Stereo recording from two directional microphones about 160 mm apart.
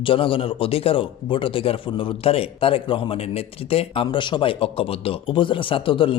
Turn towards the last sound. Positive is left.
turn(degrees=30)  # may be behind; listen again after turning